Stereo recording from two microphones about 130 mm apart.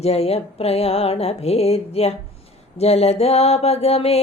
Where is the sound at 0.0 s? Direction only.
50° left (ahead or behind).